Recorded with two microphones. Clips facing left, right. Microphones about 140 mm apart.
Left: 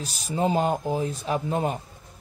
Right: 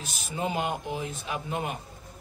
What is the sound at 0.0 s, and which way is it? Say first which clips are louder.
Speech: left 6 dB; 35° left (ahead or behind).